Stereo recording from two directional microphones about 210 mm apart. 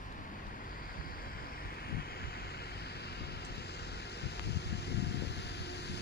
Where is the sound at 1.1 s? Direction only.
45° left (ahead or behind).